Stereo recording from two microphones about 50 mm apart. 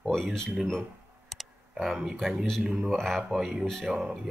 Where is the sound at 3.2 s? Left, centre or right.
Centre.